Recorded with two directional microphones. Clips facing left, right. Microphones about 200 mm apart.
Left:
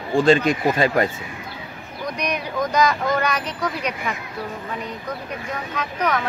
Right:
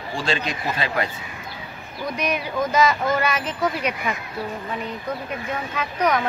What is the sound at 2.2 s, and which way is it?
Speech, 5° right (ahead or behind).